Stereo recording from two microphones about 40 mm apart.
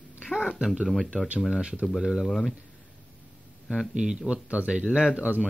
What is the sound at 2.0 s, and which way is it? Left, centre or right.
Speech, centre.